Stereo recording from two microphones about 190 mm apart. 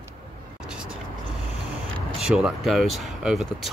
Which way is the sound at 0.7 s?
5° right (ahead or behind).